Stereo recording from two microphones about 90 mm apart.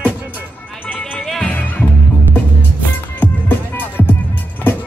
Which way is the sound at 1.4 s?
20° left (ahead or behind).